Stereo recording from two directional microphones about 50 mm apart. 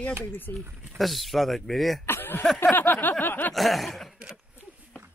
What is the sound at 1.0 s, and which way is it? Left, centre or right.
Speech, centre.